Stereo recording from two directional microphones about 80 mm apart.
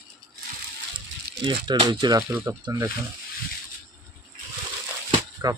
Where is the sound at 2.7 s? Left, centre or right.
Right.